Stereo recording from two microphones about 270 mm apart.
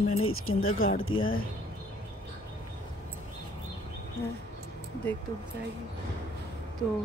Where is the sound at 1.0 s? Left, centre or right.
Left.